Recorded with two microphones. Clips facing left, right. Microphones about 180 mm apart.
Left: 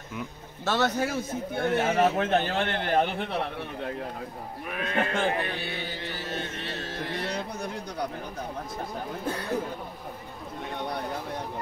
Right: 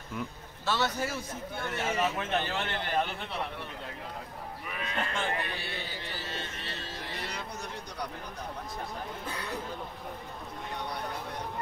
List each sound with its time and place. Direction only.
0.7 s a man's voice: 55° left (ahead or behind)
4.6 s a man's voice: 55° left (ahead or behind)
6.2 s music: 55° left (ahead or behind)